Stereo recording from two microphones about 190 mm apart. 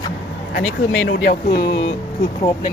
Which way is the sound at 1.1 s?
60° left (ahead or behind).